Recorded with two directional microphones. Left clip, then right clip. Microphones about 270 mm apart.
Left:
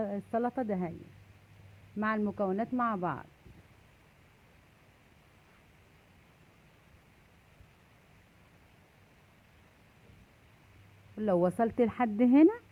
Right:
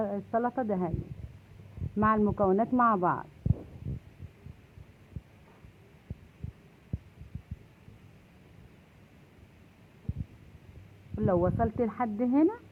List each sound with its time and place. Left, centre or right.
0.0 s speech: left
2.0 s a woman's voice: left
11.3 s speech: left